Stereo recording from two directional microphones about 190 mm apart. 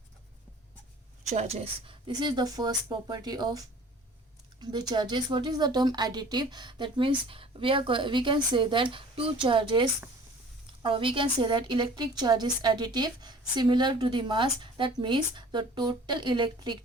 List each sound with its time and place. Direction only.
1.3 s a woman's voice: 35° right (ahead or behind)
10.8 s a woman's voice: 30° right (ahead or behind)